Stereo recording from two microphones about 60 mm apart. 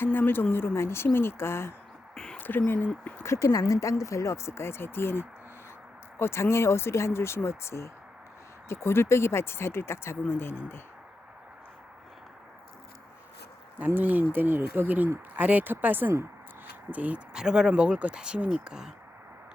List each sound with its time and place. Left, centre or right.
0.0 s speech: left
2.1 s a sound: centre
2.4 s speech: left
3.3 s speech: left
13.7 s speech: right
17.3 s speech: centre